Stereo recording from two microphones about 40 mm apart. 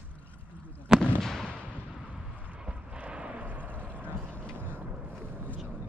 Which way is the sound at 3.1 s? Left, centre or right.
Right.